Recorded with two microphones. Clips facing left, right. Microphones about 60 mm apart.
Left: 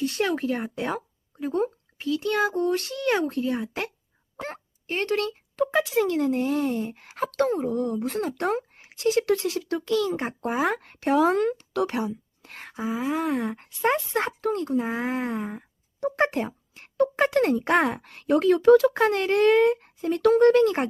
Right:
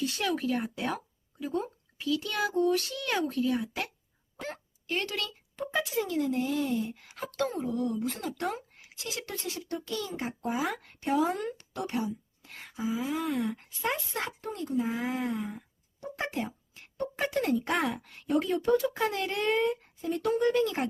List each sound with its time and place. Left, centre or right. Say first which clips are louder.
0.0 s a child's voice: left 5 dB; left
1.4 s a child's voice: left 7 dB; left
5.5 s speech: left 8 dB; left
6.1 s speech: left 5 dB; left
7.1 s speech: left 12 dB; left
7.4 s speech: left 4 dB; left
10.1 s speech: left 6 dB; left
14.4 s speech: left 4 dB; left
14.8 s speech: left 4 dB; left
16.0 s a sound: left 10 dB; left
17.5 s speech: left 6 dB; left
18.9 s speech: left 9 dB; left